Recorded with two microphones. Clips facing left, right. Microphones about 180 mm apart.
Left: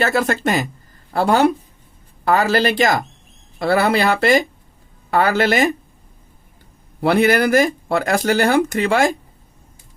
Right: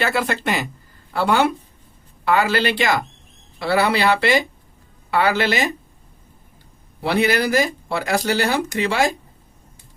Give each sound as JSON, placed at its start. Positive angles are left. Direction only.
{"t": 0.0, "sound": "speech", "side_deg": 45}
{"t": 7.0, "sound": "speech", "side_deg": 50}